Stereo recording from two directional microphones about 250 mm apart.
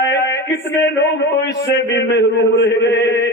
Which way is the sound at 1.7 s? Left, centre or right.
Left.